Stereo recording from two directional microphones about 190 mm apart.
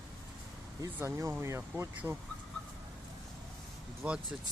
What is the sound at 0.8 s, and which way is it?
Speech, 15° right (ahead or behind).